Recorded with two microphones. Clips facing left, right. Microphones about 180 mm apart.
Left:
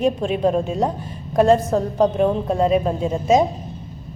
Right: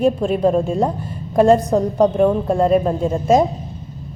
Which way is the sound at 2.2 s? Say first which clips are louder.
Right 3 dB; 5° left (ahead or behind).